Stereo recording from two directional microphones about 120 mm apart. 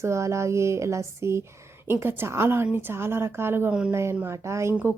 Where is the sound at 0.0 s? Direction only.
25° right (ahead or behind).